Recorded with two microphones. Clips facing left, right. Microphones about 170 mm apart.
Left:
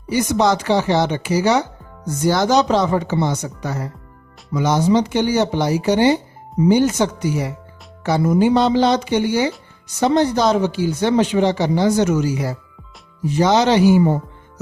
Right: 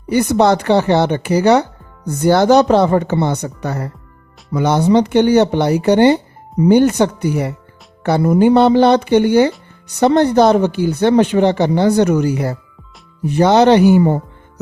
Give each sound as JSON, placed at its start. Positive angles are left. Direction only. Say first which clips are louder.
{"t": 0.1, "sound": "speech", "louder": "right 4 dB", "side_deg": -60}